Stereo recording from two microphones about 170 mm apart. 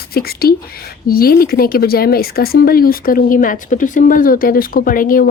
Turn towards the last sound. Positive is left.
turn(degrees=55)  # may be behind; listen again after turning